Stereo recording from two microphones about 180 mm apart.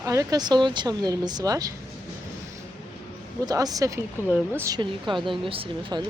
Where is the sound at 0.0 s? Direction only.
15° right (ahead or behind).